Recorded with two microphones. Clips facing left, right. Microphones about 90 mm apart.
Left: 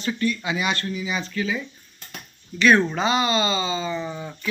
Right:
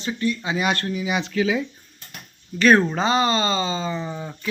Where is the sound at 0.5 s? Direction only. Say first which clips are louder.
Right 2 dB; 50° right (ahead or behind); by 1.6 s 90° right.